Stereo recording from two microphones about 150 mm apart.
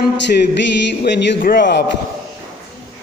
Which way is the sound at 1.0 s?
85° left.